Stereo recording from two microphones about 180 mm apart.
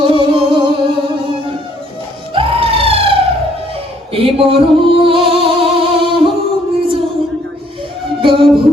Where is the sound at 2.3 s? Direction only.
30° right (ahead or behind).